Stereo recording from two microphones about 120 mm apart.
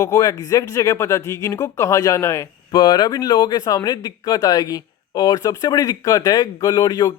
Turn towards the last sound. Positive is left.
turn(degrees=35)  # may be behind; listen again after turning